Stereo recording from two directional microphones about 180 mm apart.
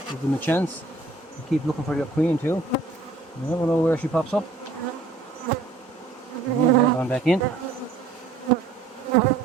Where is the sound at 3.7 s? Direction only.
10° left (ahead or behind).